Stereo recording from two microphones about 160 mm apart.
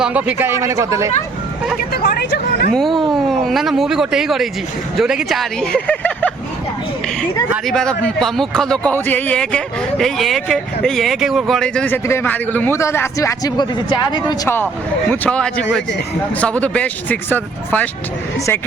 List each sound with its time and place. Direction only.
0.0 s speech: 10° right (ahead or behind)
1.9 s speech: 85° left
2.7 s speech: centre (ahead or behind)
7.7 s a man's voice: 5° left (ahead or behind); by 14.3 s 30° left (ahead or behind)
14.4 s a man's voice: 15° left (ahead or behind)